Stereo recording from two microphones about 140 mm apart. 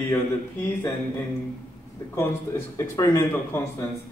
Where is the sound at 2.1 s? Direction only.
20° left (ahead or behind).